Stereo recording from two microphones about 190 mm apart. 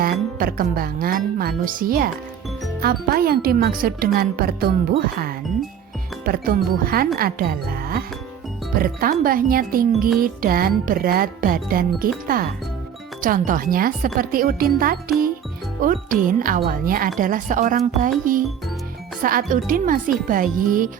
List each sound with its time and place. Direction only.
0.0 s speech: 50° right (ahead or behind)
19.2 s speech: 45° right (ahead or behind)